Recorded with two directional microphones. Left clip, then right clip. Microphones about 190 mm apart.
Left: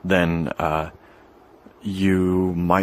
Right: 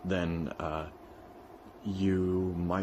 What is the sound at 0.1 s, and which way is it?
Speech, 40° left (ahead or behind).